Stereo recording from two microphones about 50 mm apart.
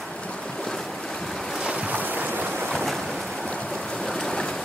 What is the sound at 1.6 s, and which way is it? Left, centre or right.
Boat, centre.